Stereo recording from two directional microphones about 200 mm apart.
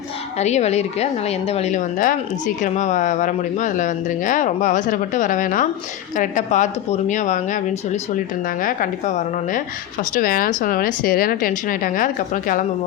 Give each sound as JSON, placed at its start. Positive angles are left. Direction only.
{"t": 0.3, "sound": "speech", "side_deg": 35}